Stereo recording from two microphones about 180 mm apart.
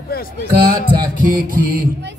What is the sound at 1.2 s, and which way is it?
Music, 50° right (ahead or behind).